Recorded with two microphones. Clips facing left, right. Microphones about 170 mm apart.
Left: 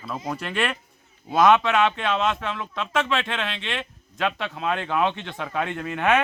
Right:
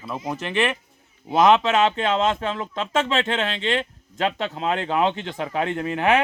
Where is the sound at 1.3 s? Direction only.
20° right (ahead or behind).